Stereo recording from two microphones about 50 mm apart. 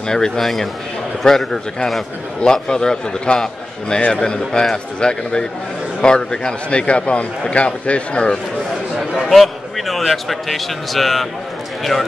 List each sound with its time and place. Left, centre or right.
0.1 s a man's voice: centre
8.9 s a sound: centre
9.3 s a man's voice: centre